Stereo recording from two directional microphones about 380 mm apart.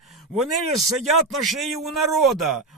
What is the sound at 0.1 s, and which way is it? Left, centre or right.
A man's voice, centre.